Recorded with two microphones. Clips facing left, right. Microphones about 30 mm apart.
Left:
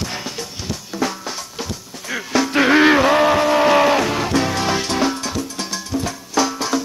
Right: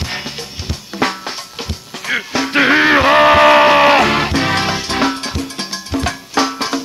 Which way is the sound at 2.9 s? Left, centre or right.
Right.